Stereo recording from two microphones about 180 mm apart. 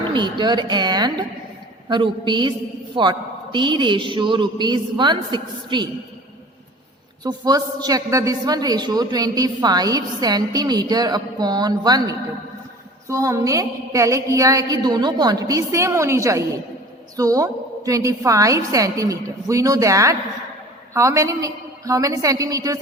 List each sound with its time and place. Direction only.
0.1 s a woman's voice: 25° right (ahead or behind)
7.3 s a woman's voice: 20° right (ahead or behind)